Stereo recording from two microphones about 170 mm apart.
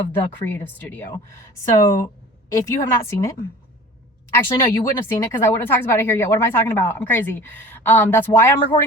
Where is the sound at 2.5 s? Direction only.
20° left (ahead or behind).